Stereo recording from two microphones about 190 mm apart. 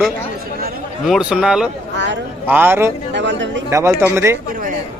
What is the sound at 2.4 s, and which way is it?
Speech, 10° right (ahead or behind).